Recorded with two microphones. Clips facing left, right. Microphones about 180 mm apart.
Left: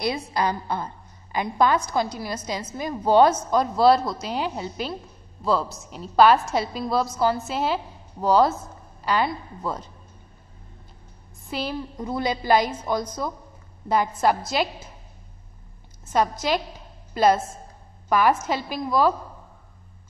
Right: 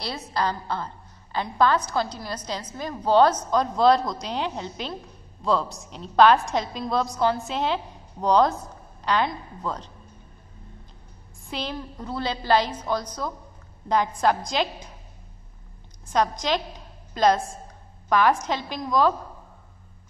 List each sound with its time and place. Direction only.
0.3 s a woman's voice: 15° left (ahead or behind)
11.4 s a woman's voice: 5° left (ahead or behind)
16.1 s a woman's voice: 5° left (ahead or behind)